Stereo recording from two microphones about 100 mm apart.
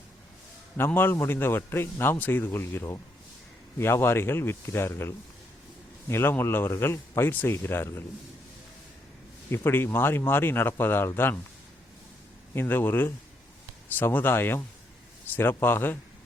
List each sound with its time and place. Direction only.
0.9 s speech: 20° left (ahead or behind)
9.5 s speech: 25° left (ahead or behind)
12.5 s speech: 20° left (ahead or behind)